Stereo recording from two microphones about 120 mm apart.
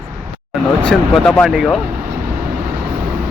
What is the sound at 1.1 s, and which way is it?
Speech, 5° left (ahead or behind).